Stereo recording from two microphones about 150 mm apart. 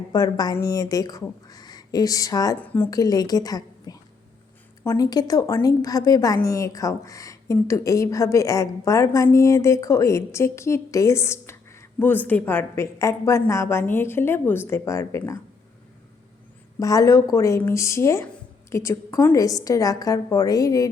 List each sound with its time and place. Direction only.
0.1 s a woman's voice: 25° left (ahead or behind)
2.6 s a woman's voice: 10° left (ahead or behind)
2.9 s a woman's voice: 25° left (ahead or behind)
16.8 s a woman's voice: 25° left (ahead or behind)